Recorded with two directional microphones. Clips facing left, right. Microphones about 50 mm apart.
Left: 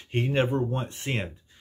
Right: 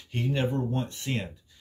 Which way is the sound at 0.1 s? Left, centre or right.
Left.